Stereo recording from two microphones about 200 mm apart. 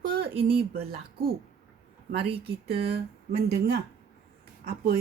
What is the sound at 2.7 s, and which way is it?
Speech, 55° right (ahead or behind).